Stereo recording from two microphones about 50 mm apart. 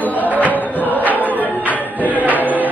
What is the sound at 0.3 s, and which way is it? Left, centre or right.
Music, right.